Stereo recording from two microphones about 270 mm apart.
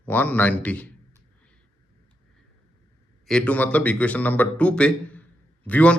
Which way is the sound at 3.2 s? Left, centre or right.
Centre.